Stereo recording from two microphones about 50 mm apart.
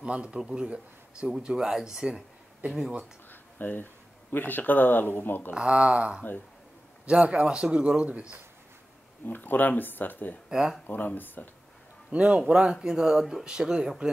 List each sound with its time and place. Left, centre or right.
0.0 s speech: centre
3.3 s speech: left
5.5 s speech: centre
9.2 s speech: left
10.5 s speech: centre
10.9 s speech: left
12.1 s a man's voice: right